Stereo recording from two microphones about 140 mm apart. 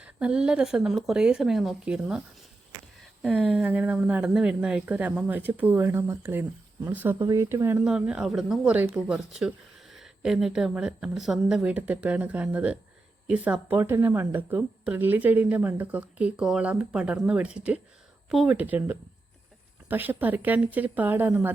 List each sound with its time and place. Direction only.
0.0 s speech: 5° right (ahead or behind)
3.4 s a woman's voice: 10° right (ahead or behind)
7.9 s a woman's voice: 5° right (ahead or behind)